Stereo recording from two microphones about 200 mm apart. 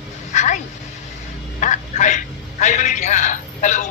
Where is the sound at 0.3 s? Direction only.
35° left (ahead or behind).